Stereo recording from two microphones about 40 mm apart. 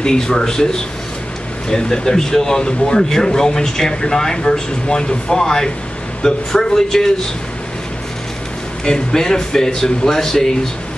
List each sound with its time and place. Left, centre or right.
0.0 s speech: centre
1.7 s speech: centre
8.8 s speech: centre